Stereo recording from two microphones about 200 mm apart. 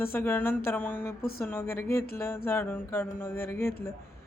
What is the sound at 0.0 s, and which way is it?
Speech, 10° left (ahead or behind).